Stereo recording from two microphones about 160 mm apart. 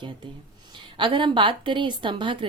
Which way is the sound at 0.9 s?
30° right (ahead or behind).